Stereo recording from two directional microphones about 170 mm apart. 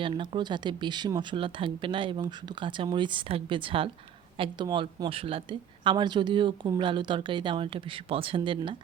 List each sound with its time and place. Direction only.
0.0 s a woman's voice: 30° right (ahead or behind)